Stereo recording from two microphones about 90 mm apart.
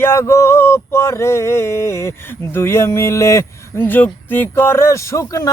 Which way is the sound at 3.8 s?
20° left (ahead or behind).